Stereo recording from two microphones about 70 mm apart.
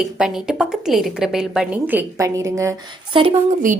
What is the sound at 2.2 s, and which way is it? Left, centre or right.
Speech, right.